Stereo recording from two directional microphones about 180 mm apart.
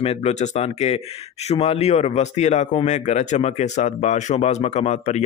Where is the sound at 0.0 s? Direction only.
35° left (ahead or behind).